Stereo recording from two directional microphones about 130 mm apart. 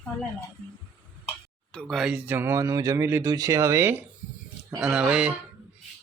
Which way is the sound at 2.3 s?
15° right (ahead or behind).